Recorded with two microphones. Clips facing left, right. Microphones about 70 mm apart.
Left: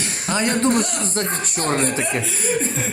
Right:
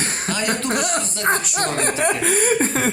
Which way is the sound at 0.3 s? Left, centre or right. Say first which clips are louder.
Left 5 dB; left.